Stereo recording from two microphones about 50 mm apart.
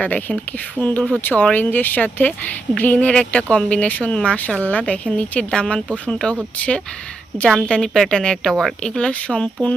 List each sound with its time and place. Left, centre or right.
0.0 s speech: left
7.5 s speech: centre
8.8 s speech: centre